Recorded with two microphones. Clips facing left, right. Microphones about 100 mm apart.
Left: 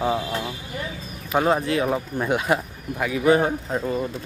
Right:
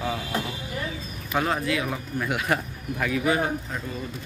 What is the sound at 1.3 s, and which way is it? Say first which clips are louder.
Speech: left 5 dB; 25° left (ahead or behind).